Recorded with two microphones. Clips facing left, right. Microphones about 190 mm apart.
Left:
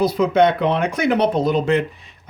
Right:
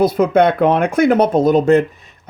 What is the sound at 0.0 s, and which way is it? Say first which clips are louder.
Speech: right 3 dB; 50° right (ahead or behind).